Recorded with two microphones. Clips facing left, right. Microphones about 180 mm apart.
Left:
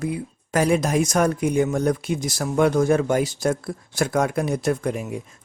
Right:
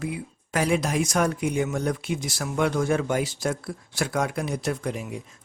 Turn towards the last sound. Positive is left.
turn(degrees=50)  # may be behind; listen again after turning